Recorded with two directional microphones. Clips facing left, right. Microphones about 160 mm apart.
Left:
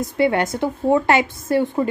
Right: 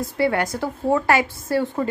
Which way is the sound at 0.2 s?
20° left (ahead or behind).